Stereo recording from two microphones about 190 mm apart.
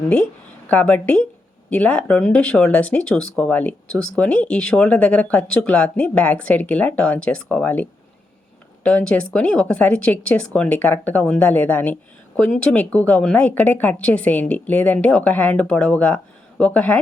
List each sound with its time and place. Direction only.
0.7 s speech: 10° left (ahead or behind)